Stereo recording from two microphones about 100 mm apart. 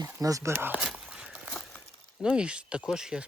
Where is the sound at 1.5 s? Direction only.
10° left (ahead or behind).